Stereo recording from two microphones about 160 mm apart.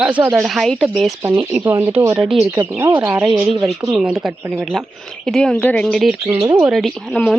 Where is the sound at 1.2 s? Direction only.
20° right (ahead or behind).